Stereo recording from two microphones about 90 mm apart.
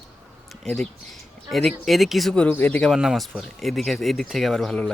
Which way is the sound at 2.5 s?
20° left (ahead or behind).